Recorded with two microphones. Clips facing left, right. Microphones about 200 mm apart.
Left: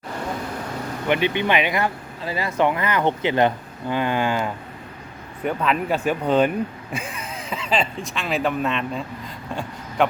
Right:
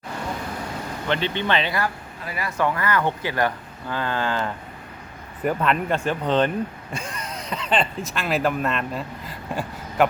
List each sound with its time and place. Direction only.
1.0 s speech: 15° left (ahead or behind)
5.4 s speech: centre (ahead or behind)